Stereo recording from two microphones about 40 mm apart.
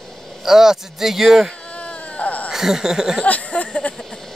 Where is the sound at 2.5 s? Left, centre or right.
Centre.